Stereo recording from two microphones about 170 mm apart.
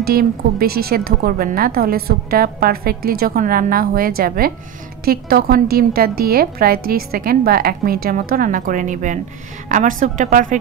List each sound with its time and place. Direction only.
0.0 s a woman's voice: 65° right (ahead or behind)